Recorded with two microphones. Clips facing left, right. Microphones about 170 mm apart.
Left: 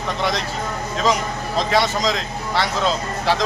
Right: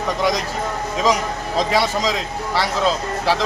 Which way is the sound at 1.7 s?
10° right (ahead or behind).